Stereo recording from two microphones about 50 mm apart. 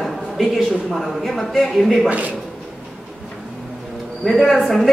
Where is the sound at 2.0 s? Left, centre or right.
Right.